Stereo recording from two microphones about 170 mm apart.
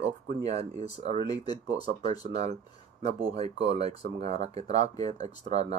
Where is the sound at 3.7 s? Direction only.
40° right (ahead or behind).